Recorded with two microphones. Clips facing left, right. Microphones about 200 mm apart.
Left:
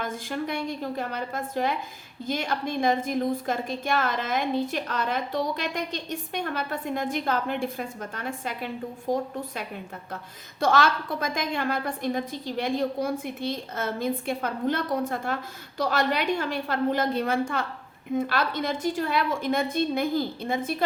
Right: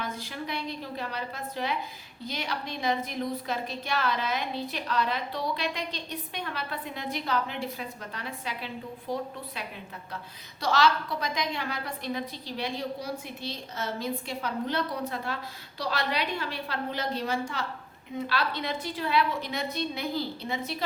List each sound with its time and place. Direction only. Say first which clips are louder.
0.0 s a woman's voice: left 5 dB; 50° left (ahead or behind)